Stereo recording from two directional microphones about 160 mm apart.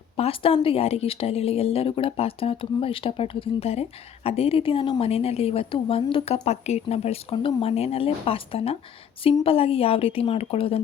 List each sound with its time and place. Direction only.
0.2 s speech: 35° left (ahead or behind)